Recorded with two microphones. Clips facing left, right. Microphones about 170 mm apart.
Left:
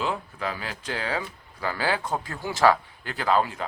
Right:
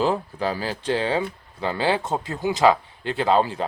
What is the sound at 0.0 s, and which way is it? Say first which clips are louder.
Speech: right 6 dB; 35° right (ahead or behind).